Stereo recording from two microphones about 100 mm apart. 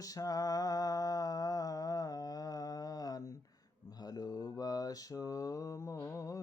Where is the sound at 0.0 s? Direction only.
35° left (ahead or behind).